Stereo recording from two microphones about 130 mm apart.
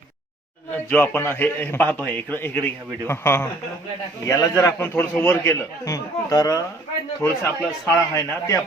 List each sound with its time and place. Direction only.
0.9 s a man's voice: 15° left (ahead or behind)